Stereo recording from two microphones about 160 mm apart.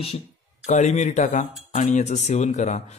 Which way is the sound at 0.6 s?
50° left (ahead or behind).